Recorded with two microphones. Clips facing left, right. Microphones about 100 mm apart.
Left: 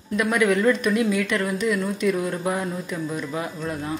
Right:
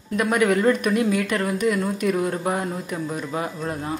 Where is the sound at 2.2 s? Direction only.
25° right (ahead or behind).